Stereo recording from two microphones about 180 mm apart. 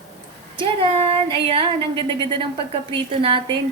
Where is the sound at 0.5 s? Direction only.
30° right (ahead or behind).